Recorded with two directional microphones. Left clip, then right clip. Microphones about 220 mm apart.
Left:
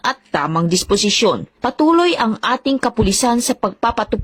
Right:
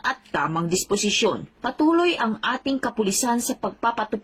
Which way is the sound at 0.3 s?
40° left (ahead or behind).